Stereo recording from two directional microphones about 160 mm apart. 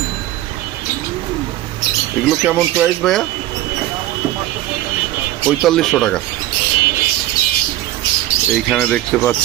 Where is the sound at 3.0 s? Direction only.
5° left (ahead or behind).